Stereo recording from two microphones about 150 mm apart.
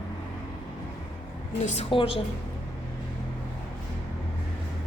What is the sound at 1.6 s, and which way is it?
Speech, 45° left (ahead or behind).